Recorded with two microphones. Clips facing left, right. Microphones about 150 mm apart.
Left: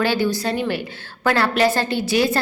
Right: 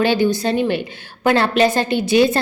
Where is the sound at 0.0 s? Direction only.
20° right (ahead or behind).